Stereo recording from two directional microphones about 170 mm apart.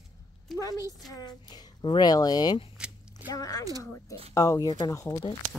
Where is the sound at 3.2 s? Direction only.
20° left (ahead or behind).